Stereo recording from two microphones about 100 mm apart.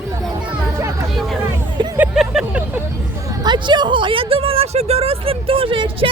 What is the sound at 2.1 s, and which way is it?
Vehicle, 10° right (ahead or behind).